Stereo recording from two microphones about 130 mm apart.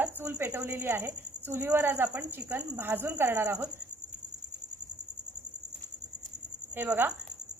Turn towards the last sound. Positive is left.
turn(degrees=-15)  # may be behind; listen again after turning